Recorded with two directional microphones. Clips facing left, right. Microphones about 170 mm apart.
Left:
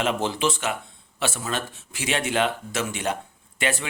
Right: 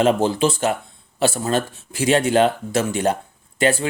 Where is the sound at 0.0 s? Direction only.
35° right (ahead or behind).